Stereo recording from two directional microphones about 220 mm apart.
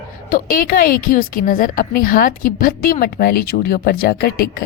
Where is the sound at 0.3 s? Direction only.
40° left (ahead or behind).